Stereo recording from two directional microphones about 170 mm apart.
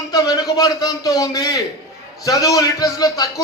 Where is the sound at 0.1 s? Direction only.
20° left (ahead or behind).